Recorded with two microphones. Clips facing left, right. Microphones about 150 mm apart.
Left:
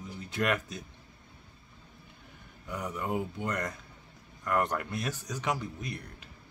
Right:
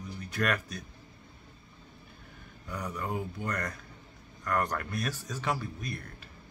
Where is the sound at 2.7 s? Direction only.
20° left (ahead or behind).